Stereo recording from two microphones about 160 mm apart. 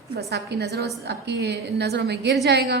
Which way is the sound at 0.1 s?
85° right.